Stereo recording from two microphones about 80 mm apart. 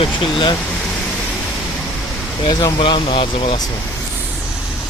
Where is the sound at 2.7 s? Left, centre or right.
Left.